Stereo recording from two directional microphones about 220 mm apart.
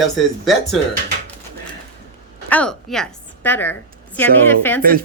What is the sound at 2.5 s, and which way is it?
A woman's voice, 5° left (ahead or behind).